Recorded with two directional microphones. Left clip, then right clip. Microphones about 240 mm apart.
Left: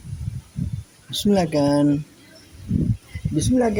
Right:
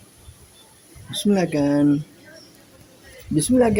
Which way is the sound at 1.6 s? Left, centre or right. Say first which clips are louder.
Right 1 dB; left.